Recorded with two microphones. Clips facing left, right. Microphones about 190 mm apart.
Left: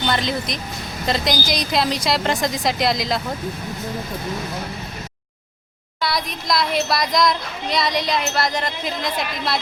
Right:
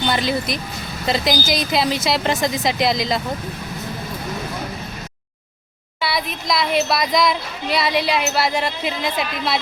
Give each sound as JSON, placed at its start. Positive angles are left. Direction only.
{"t": 0.1, "sound": "speech", "side_deg": -5}
{"t": 6.0, "sound": "speech", "side_deg": -5}